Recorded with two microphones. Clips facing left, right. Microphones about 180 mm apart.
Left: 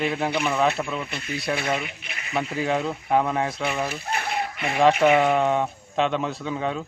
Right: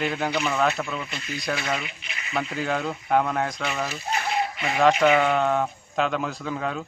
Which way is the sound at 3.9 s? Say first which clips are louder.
Right 1 dB; 55° left (ahead or behind).